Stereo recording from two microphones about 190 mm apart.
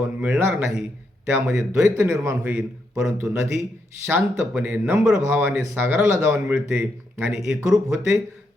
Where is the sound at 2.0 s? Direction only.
15° right (ahead or behind).